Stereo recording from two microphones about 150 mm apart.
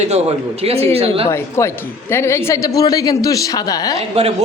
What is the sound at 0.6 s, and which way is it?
Speech, 45° right (ahead or behind).